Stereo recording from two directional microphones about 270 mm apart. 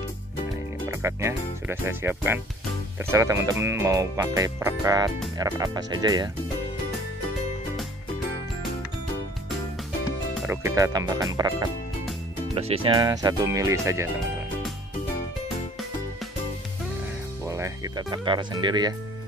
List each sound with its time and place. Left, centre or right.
0.8 s speech: centre
10.4 s speech: centre
17.5 s music: centre